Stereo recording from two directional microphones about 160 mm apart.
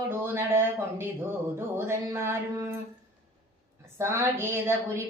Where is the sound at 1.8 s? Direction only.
15° right (ahead or behind).